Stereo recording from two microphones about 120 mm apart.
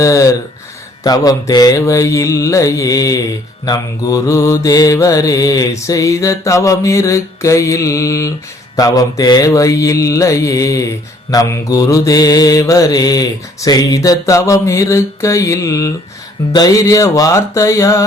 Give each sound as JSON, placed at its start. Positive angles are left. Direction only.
{"t": 0.0, "sound": "mantra", "side_deg": 25}